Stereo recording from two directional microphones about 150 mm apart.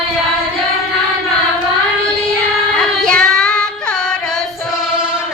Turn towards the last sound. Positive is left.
turn(degrees=5)  # may be behind; listen again after turning